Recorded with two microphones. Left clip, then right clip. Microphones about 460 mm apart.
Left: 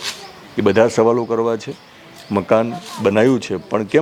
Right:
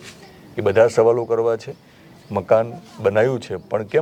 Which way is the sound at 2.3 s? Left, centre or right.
Right.